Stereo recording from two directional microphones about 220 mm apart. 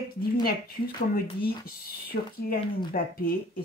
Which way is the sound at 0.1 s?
45° left (ahead or behind).